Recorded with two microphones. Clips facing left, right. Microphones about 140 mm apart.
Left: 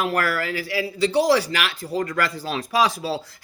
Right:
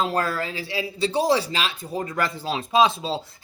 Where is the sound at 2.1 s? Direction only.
25° right (ahead or behind).